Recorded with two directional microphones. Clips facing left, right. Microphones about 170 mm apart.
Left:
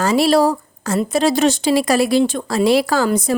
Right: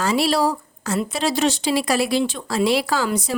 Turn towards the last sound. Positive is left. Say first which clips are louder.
# left 5 dB
turn(degrees=50)  # may be behind; listen again after turning